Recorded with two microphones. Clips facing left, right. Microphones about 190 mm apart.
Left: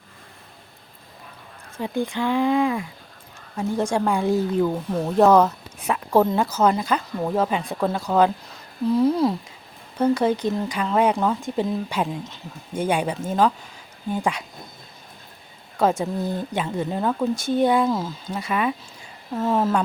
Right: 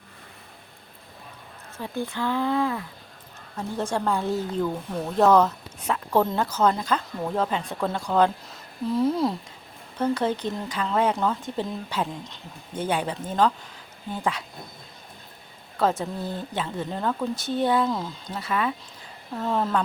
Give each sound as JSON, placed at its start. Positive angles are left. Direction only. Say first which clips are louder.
{"t": 1.8, "sound": "speech", "louder": "left 4 dB", "side_deg": 15}
{"t": 10.0, "sound": "speech", "louder": "left 5 dB", "side_deg": 10}
{"t": 15.8, "sound": "speech", "louder": "left 3 dB", "side_deg": 10}